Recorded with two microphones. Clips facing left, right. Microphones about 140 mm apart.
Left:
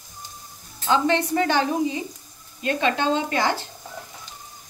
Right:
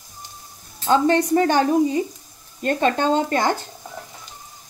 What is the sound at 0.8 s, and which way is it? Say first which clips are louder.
Speech: right 4 dB; 45° right (ahead or behind).